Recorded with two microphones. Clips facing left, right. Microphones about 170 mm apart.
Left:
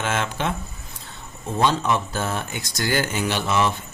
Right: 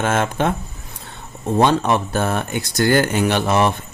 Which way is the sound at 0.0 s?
50° right (ahead or behind).